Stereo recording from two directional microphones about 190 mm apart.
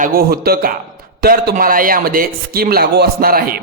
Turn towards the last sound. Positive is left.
turn(degrees=-50)  # may be behind; listen again after turning